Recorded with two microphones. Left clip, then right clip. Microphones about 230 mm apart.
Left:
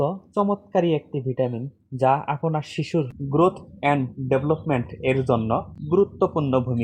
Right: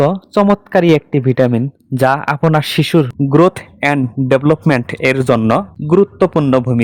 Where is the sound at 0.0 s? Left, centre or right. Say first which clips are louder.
Right 11 dB; right.